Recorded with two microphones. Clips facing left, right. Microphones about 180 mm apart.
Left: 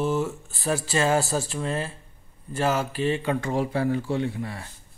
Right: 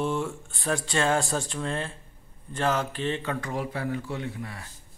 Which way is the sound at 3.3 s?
30° left (ahead or behind).